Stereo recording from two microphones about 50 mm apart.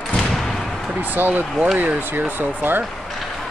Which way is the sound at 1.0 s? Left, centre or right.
Right.